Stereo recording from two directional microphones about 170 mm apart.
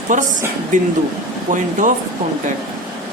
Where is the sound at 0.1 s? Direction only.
50° right (ahead or behind).